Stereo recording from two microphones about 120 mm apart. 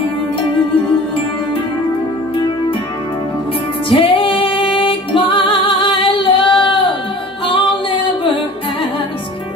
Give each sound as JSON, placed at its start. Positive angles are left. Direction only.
{"t": 3.9, "sound": "music", "side_deg": 50}